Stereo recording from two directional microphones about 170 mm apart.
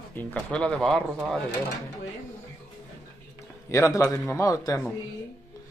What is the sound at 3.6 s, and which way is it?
A man's voice, 20° left (ahead or behind).